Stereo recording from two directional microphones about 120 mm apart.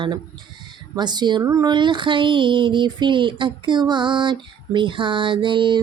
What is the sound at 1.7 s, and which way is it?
Speech, 40° right (ahead or behind).